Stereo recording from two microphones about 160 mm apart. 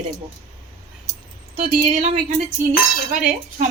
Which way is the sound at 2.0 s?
55° right (ahead or behind).